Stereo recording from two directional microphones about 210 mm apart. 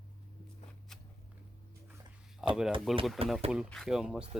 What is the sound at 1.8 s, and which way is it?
Dog, 5° right (ahead or behind).